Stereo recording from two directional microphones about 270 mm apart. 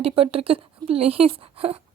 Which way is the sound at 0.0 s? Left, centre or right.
Right.